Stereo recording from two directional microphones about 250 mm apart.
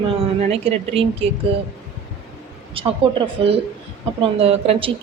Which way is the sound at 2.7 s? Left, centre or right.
Right.